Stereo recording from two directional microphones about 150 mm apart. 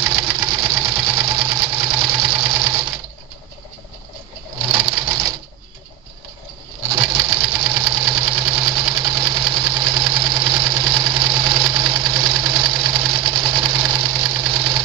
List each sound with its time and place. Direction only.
0.0 s sewing machine: 30° right (ahead or behind)
4.6 s sewing machine: 30° right (ahead or behind)
6.9 s sewing machine: 30° right (ahead or behind)